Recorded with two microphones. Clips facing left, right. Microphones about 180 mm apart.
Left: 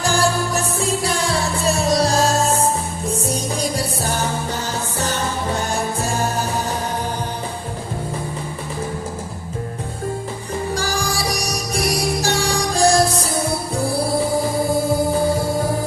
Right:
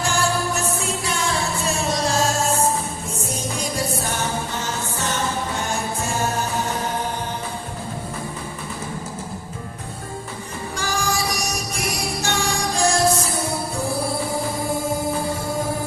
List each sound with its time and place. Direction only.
0.0 s music: 35° left (ahead or behind)
10.8 s music: 35° left (ahead or behind)